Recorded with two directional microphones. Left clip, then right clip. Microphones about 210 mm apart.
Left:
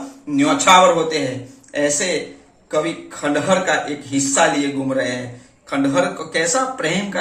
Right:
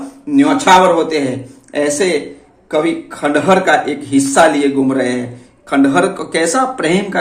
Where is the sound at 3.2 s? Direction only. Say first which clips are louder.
Right 6 dB; 55° right (ahead or behind).